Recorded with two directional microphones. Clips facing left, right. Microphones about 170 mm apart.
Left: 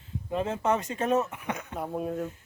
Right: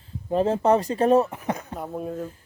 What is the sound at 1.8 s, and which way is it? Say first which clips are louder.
Speech: left 1 dB; centre (ahead or behind).